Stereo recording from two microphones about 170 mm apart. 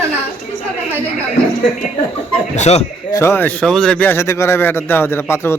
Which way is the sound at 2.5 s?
40° left (ahead or behind).